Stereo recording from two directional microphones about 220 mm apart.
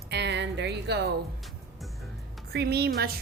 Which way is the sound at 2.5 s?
45° right (ahead or behind).